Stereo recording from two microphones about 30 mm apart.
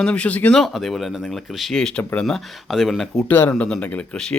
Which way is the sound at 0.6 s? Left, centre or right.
Centre.